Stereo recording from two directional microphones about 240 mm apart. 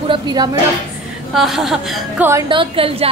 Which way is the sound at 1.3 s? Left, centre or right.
Centre.